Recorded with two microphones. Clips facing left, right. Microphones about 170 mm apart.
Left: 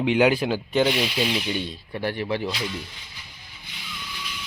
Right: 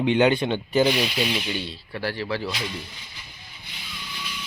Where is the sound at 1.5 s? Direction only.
20° left (ahead or behind).